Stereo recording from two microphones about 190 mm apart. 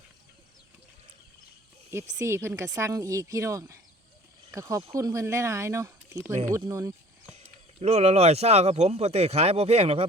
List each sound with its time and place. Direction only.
2.1 s speech: 15° right (ahead or behind)
7.3 s speech: 35° right (ahead or behind)